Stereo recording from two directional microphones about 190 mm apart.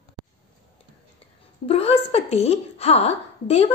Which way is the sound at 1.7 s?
30° left (ahead or behind).